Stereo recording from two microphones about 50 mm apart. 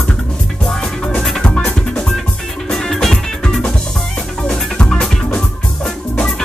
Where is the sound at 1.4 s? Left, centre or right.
Centre.